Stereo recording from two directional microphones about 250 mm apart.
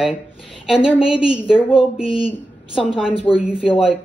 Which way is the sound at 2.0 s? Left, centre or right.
Left.